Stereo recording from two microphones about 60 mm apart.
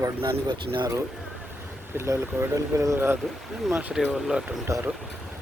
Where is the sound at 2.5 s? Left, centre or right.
Right.